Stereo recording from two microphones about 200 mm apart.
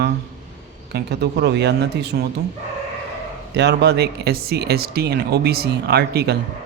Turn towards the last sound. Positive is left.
turn(degrees=-55)  # may be behind; listen again after turning